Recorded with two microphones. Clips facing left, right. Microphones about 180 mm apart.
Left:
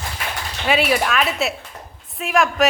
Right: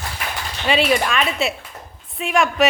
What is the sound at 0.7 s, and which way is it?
A woman's voice, 5° left (ahead or behind).